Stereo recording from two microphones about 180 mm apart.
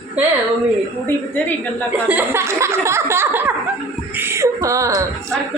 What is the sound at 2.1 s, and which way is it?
A woman's voice, 10° right (ahead or behind).